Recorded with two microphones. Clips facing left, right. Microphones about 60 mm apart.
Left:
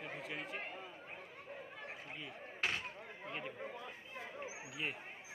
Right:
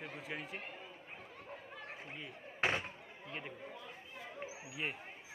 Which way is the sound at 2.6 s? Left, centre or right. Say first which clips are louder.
Right 4 dB; right.